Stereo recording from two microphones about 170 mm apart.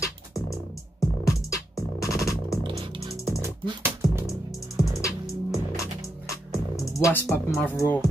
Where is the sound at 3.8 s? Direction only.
15° right (ahead or behind).